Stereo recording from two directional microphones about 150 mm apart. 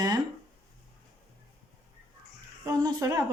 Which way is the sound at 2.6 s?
20° right (ahead or behind).